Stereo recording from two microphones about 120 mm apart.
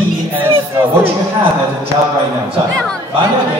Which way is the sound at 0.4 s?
15° right (ahead or behind).